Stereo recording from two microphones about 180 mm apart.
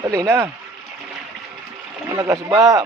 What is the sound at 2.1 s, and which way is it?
Speech, 15° right (ahead or behind).